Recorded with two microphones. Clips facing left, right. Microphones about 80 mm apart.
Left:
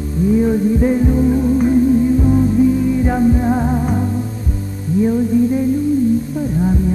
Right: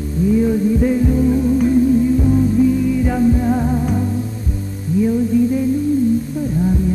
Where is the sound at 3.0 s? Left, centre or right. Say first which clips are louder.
Left 1 dB; left.